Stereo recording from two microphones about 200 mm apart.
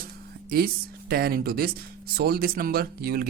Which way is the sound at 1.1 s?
50° right (ahead or behind).